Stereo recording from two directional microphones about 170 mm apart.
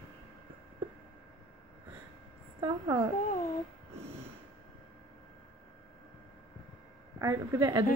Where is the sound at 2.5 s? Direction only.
30° right (ahead or behind).